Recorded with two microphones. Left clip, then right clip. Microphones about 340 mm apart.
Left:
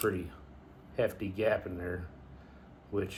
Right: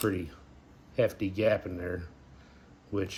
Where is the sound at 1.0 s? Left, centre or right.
Right.